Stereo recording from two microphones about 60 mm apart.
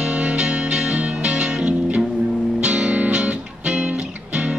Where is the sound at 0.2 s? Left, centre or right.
Centre.